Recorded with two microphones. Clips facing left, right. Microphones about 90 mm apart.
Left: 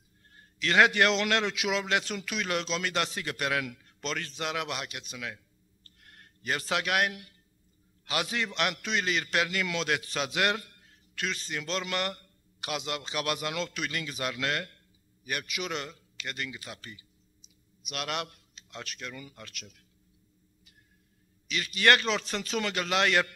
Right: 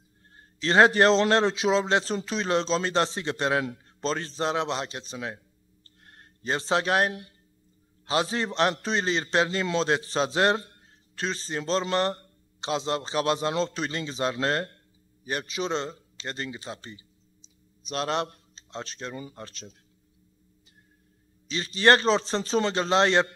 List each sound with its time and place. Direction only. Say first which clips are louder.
0.4 s a man's voice: right 4 dB; 30° right (ahead or behind)
5.9 s a sound: right 2 dB; 30° right (ahead or behind)
8.1 s a man's voice: right 5 dB; 30° right (ahead or behind)
21.5 s a man's voice: right 4 dB; 30° right (ahead or behind)